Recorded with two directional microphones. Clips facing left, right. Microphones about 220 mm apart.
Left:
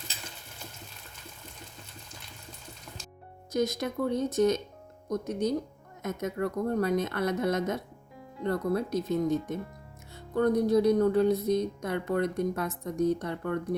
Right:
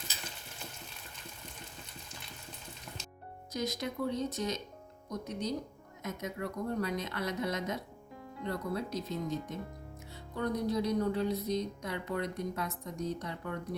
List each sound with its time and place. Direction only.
3.5 s speech: 50° left (ahead or behind)